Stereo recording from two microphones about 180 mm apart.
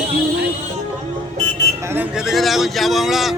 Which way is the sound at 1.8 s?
10° right (ahead or behind).